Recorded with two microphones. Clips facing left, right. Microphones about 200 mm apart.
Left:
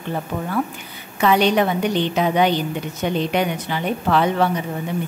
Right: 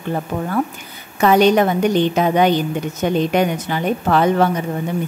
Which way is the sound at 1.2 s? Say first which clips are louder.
Right 4 dB; 45° right (ahead or behind).